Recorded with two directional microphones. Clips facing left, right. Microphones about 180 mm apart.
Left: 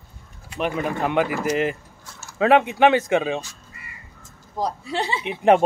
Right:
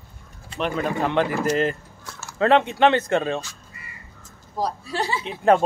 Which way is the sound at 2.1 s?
75° right (ahead or behind).